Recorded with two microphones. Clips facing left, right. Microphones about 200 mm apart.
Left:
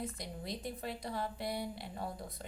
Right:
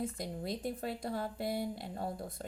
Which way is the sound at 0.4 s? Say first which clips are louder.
Right 3 dB; 50° right (ahead or behind).